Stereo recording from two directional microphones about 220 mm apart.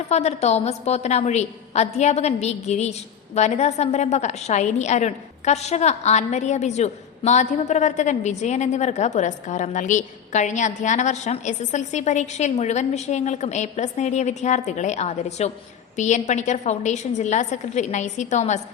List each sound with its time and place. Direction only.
0.1 s a woman's voice: 30° left (ahead or behind)